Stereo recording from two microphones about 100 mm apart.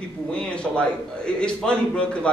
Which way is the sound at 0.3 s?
10° left (ahead or behind).